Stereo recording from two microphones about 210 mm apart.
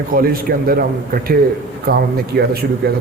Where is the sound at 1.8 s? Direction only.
45° right (ahead or behind).